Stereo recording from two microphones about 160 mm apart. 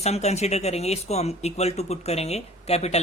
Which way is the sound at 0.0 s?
40° left (ahead or behind).